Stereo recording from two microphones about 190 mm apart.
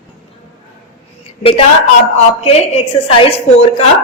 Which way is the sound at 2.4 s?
35° left (ahead or behind).